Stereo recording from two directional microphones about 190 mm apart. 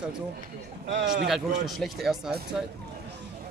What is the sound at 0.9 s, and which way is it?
Speech, 60° right (ahead or behind).